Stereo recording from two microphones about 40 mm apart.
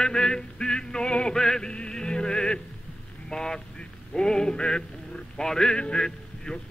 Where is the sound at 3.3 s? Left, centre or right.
Centre.